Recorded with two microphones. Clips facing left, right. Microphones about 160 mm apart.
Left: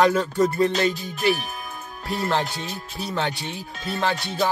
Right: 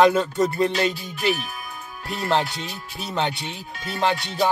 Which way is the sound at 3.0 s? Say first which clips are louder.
Right 1 dB; 20° right (ahead or behind).